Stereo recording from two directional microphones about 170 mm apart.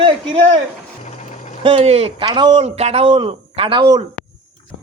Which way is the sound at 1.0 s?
45° left (ahead or behind).